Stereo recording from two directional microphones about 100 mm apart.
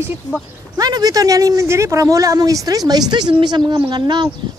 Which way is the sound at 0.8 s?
40° right (ahead or behind).